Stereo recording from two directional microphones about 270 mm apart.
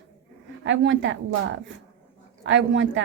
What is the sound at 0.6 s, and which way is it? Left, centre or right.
A woman's voice, right.